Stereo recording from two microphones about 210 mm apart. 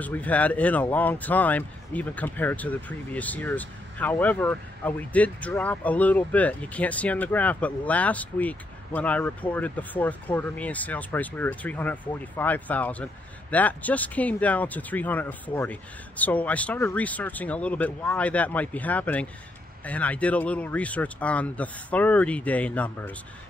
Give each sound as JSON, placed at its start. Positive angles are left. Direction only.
{"t": 0.0, "sound": "speech", "side_deg": 5}